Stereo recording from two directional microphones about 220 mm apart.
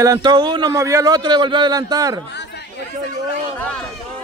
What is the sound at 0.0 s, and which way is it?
A man's voice, 15° right (ahead or behind).